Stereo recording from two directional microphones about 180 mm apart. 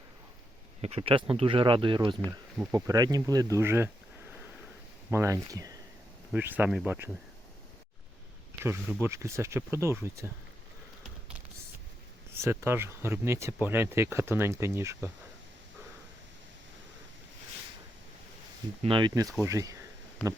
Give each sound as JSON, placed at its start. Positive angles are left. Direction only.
{"t": 0.8, "sound": "speech", "side_deg": -35}
{"t": 5.1, "sound": "speech", "side_deg": -15}
{"t": 8.6, "sound": "speech", "side_deg": -15}
{"t": 12.3, "sound": "speech", "side_deg": -15}
{"t": 18.8, "sound": "speech", "side_deg": -30}